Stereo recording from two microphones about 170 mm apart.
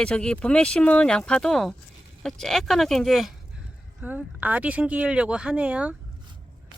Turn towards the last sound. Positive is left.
turn(degrees=-5)  # may be behind; listen again after turning